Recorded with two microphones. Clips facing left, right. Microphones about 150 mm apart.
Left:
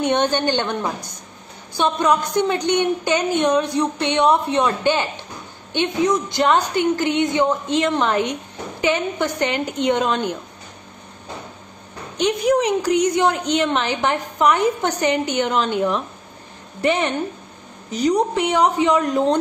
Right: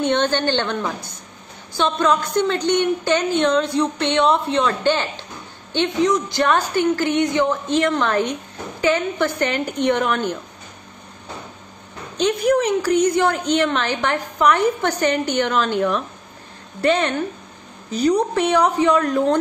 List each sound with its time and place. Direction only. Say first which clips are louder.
0.0 s a woman's voice: even; 15° left (ahead or behind)
12.2 s a woman's voice: even; 15° left (ahead or behind)